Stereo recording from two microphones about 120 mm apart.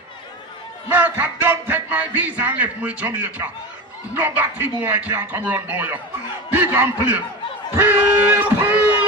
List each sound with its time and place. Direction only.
0.8 s speech: 15° right (ahead or behind)